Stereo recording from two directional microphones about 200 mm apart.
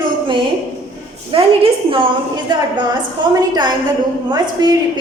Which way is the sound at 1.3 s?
25° right (ahead or behind).